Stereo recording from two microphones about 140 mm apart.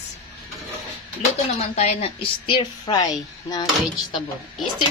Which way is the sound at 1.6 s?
55° left (ahead or behind).